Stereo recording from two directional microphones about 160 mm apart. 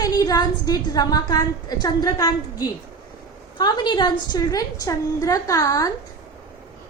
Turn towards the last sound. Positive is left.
turn(degrees=20)  # may be behind; listen again after turning